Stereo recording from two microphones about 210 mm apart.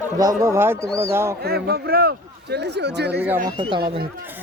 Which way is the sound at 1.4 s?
50° right (ahead or behind).